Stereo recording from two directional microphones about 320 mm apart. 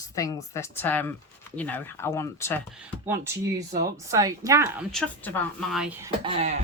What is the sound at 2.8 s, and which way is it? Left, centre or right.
Speech, centre.